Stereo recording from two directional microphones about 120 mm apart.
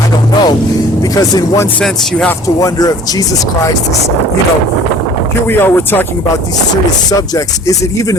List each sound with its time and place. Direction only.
1.1 s chopping: 30° left (ahead or behind)
1.8 s speech: 5° left (ahead or behind)
2.6 s speech: 30° left (ahead or behind)
5.5 s speech: 15° left (ahead or behind)
7.1 s chopping: 30° left (ahead or behind)